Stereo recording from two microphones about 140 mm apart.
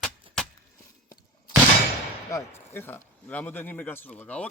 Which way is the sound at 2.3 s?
15° left (ahead or behind).